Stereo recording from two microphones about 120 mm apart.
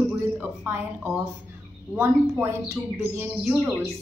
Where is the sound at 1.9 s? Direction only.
20° right (ahead or behind).